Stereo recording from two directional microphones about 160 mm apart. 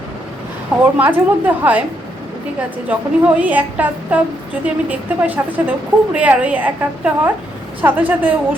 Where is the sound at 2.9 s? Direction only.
10° right (ahead or behind).